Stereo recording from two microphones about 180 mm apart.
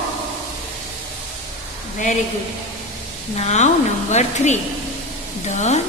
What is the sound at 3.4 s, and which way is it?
A woman's voice, 40° left (ahead or behind).